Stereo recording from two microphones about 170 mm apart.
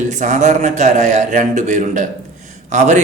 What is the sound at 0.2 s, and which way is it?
Speech, 45° right (ahead or behind).